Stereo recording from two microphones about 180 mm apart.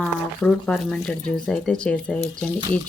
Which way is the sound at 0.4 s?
5° left (ahead or behind).